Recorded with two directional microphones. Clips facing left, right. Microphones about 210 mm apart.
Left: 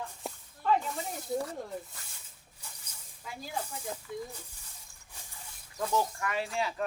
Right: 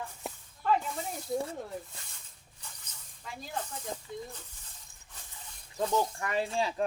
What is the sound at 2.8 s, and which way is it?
Speech, 5° left (ahead or behind).